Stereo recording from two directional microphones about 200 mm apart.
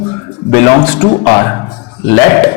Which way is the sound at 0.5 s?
15° left (ahead or behind).